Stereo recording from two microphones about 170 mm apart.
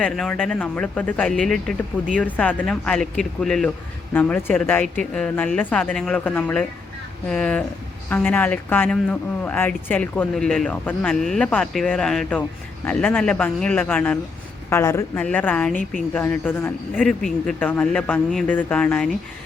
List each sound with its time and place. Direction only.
0.0 s speech: 5° left (ahead or behind)